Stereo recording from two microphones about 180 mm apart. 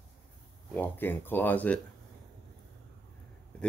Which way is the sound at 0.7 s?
10° left (ahead or behind).